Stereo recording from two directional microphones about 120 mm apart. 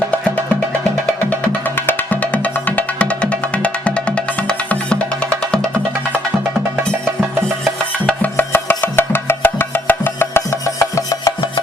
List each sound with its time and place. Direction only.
1.3 s music: 15° left (ahead or behind)
7.6 s music: 10° left (ahead or behind); by 11.3 s 25° left (ahead or behind)